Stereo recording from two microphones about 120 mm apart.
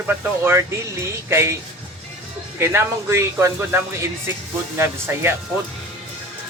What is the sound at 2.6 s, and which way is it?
Speech, 20° right (ahead or behind).